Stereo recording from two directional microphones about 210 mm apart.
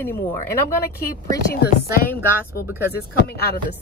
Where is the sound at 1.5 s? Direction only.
45° left (ahead or behind).